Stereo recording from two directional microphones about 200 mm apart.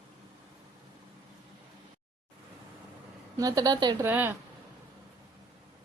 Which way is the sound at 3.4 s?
20° right (ahead or behind).